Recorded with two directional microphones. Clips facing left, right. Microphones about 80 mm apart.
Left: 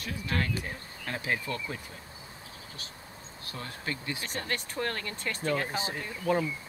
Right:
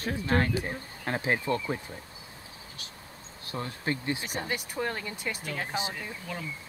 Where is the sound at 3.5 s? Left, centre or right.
Right.